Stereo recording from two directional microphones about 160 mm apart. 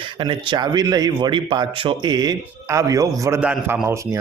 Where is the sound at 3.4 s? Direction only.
10° right (ahead or behind).